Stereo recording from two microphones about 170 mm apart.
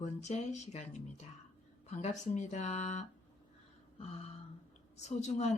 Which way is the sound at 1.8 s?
40° left (ahead or behind).